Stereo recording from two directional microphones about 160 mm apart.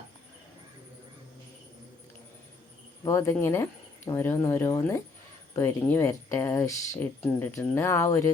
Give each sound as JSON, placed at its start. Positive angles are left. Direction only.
{"t": 3.0, "sound": "speech", "side_deg": 20}